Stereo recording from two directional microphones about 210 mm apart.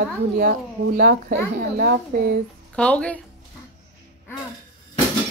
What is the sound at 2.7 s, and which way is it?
Speech, 5° left (ahead or behind).